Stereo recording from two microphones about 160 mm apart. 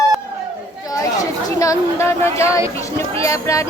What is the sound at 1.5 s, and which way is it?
Speech, 20° left (ahead or behind).